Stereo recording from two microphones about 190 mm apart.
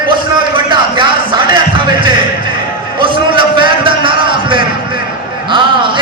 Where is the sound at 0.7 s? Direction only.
25° right (ahead or behind).